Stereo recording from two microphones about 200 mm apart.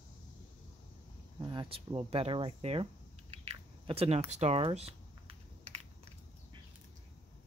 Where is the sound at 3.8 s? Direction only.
30° right (ahead or behind).